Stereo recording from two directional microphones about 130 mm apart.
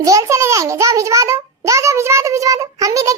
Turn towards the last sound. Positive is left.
turn(degrees=-25)  # may be behind; listen again after turning